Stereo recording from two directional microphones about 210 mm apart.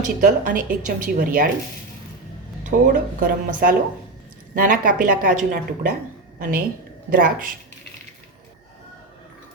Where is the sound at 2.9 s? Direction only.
40° right (ahead or behind).